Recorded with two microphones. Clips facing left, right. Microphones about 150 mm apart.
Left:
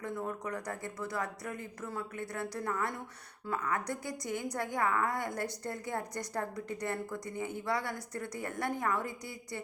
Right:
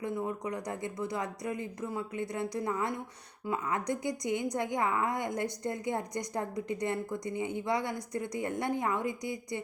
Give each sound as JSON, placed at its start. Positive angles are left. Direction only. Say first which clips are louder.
{"t": 0.0, "sound": "a woman's voice", "louder": "right 3 dB", "side_deg": -15}